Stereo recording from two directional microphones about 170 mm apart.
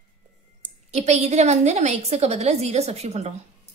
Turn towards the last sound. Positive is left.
turn(degrees=-40)  # may be behind; listen again after turning